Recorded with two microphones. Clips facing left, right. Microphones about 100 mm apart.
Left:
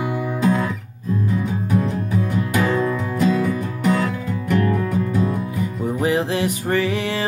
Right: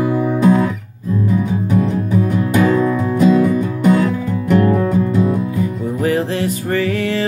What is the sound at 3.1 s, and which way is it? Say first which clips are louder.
Music: right 7 dB; 30° right (ahead or behind).